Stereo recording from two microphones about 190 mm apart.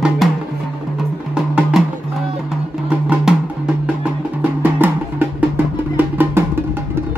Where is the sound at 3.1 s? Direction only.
5° right (ahead or behind).